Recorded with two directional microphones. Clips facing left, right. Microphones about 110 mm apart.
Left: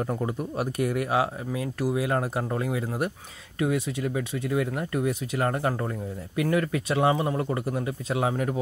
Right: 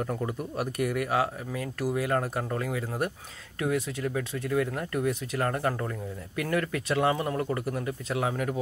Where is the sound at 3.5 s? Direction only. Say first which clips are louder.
Left 2 dB; 10° left (ahead or behind); by 8.5 s 25° left (ahead or behind).